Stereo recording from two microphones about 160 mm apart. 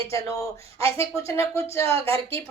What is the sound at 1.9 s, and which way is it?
Speech, 35° right (ahead or behind).